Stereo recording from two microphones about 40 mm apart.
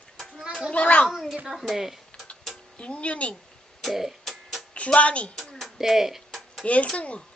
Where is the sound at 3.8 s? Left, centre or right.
Centre.